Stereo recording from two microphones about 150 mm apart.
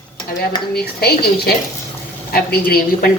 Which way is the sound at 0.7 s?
90° left.